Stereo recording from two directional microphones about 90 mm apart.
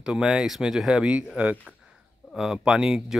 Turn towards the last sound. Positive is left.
turn(degrees=-10)  # may be behind; listen again after turning